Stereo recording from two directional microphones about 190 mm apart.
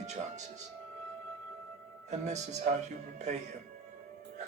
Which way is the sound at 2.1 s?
35° right (ahead or behind).